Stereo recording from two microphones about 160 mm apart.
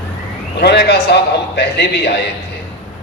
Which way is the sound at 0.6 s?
90° left.